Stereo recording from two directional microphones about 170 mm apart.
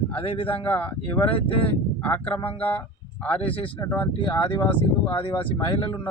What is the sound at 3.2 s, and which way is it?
Speech, 10° left (ahead or behind).